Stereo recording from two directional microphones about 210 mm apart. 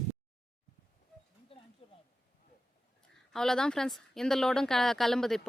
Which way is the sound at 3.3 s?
Centre (ahead or behind).